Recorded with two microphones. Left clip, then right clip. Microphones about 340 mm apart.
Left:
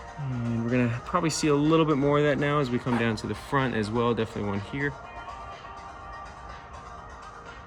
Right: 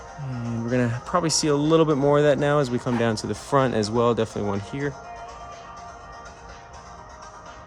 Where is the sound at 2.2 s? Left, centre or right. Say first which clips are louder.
Right 5 dB; right.